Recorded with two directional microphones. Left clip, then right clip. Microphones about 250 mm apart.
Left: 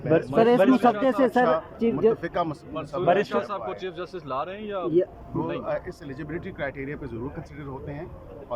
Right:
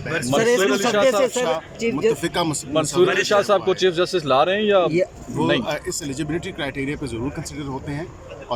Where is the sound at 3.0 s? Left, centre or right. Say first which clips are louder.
Right 4 dB; right.